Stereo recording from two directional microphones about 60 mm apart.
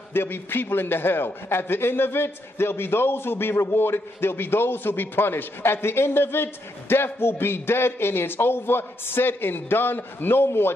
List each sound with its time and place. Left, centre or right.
0.1 s a man's voice: left